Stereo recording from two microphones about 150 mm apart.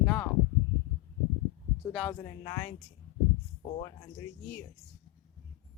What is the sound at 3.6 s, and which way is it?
Speech, 45° left (ahead or behind).